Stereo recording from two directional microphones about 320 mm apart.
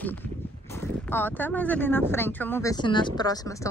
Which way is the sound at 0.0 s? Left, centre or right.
Centre.